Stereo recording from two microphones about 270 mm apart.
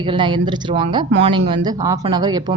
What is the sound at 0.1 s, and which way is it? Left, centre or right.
Speech, centre.